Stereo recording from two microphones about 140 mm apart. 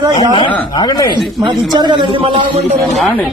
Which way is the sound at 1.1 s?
30° right (ahead or behind).